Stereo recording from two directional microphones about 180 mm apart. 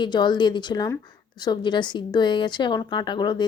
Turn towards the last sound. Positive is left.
turn(degrees=25)  # may be behind; listen again after turning